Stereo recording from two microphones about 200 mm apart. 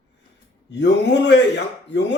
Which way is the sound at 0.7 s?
60° left (ahead or behind).